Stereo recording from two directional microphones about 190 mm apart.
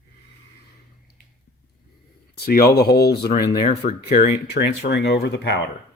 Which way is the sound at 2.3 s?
55° left (ahead or behind).